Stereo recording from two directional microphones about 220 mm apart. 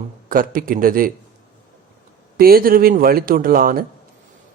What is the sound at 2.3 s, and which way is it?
A man's voice, 40° right (ahead or behind).